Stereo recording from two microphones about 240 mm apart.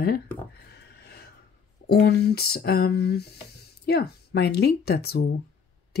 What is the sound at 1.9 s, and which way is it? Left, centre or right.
Speech, left.